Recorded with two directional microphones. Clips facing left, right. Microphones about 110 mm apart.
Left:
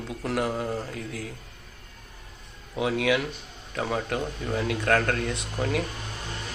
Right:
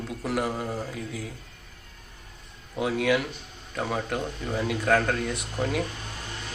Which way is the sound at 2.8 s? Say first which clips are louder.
Even; centre (ahead or behind).